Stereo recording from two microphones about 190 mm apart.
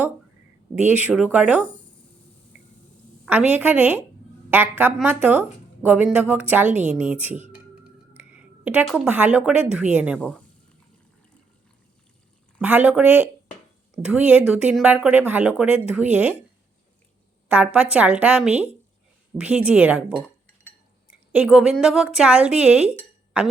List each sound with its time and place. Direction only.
0.9 s a woman's voice: 5° right (ahead or behind)
3.2 s a woman's voice: 10° right (ahead or behind)
6.7 s a woman's voice: 40° right (ahead or behind)
6.9 s a woman's voice: 5° right (ahead or behind)
10.2 s a woman's voice: 5° left (ahead or behind)
12.5 s a woman's voice: 10° right (ahead or behind)
17.5 s a woman's voice: 5° right (ahead or behind)
23.0 s a sound: 5° right (ahead or behind)